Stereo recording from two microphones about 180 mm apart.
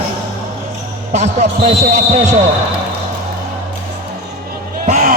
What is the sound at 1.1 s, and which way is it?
A man's voice, 40° right (ahead or behind).